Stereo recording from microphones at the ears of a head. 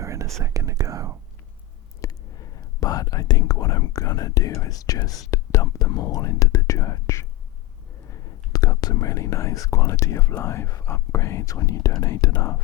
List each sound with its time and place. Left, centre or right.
0.0 s whispering: right
2.0 s speech: left